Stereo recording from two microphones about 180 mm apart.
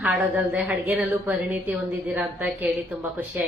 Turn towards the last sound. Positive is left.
turn(degrees=-5)  # may be behind; listen again after turning